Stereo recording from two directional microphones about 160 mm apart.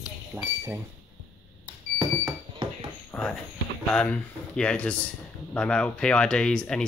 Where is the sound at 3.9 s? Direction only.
5° left (ahead or behind).